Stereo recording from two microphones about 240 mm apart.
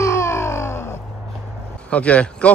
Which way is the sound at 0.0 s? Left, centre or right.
Centre.